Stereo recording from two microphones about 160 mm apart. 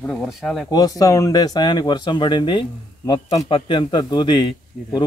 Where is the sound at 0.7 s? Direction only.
20° left (ahead or behind).